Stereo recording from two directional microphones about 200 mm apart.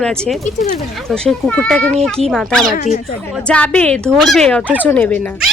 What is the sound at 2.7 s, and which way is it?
Speech, 45° left (ahead or behind).